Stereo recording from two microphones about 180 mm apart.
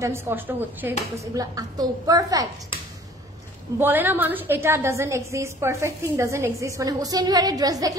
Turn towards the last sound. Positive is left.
turn(degrees=-20)  # may be behind; listen again after turning